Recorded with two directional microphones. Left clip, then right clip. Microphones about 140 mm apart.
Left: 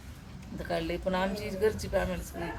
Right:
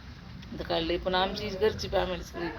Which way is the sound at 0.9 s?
10° right (ahead or behind).